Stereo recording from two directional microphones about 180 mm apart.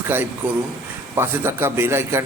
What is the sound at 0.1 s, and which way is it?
A man's voice, 10° right (ahead or behind).